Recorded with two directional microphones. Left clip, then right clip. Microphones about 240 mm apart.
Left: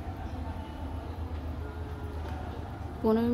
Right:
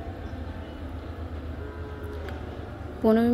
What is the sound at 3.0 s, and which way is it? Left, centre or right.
Speech, centre.